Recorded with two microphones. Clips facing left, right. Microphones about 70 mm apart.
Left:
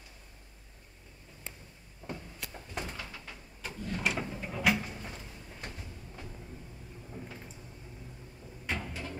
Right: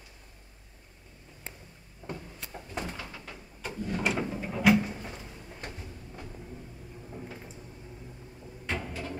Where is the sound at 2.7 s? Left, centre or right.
Centre.